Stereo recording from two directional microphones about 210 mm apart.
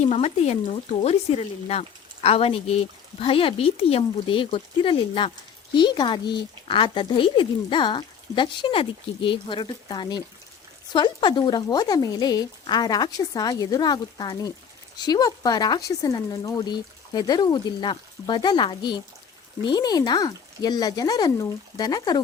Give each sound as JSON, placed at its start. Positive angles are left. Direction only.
{"t": 0.0, "sound": "speech", "side_deg": 30}